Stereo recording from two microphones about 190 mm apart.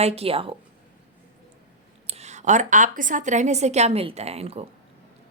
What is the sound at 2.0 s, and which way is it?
A woman's voice, 35° right (ahead or behind).